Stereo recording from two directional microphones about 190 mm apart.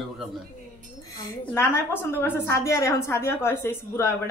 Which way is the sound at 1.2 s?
15° left (ahead or behind).